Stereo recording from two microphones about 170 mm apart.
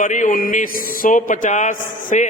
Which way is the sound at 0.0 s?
50° left (ahead or behind).